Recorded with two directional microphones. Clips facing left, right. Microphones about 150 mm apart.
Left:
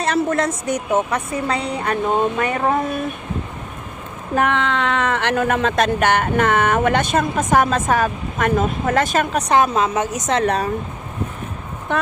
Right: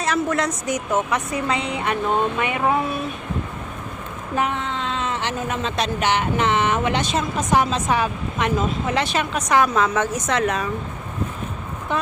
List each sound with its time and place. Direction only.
0.0 s a woman's voice: 55° left (ahead or behind)
1.3 s a woman's voice: 35° left (ahead or behind)
4.4 s speech: 70° left (ahead or behind); by 9.4 s 45° left (ahead or behind)
9.5 s speech: 25° left (ahead or behind)
10.4 s a woman's voice: 35° left (ahead or behind)